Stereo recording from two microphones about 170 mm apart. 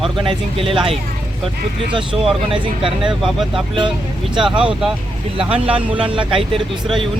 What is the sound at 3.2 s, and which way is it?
Speech, centre (ahead or behind).